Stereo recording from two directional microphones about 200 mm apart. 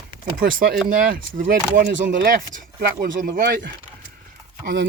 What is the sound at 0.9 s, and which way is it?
Speech, 45° right (ahead or behind).